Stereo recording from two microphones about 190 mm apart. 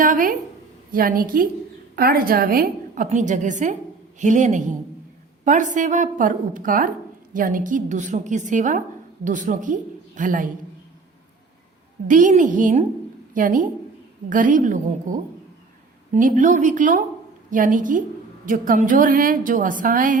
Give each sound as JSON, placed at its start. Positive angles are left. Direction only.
{"t": 0.0, "sound": "a sound", "side_deg": -45}
{"t": 0.9, "sound": "a woman's voice", "side_deg": -50}
{"t": 12.0, "sound": "a woman's voice", "side_deg": -45}